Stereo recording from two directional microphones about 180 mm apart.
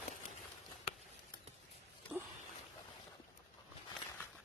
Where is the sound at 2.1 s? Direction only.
10° right (ahead or behind).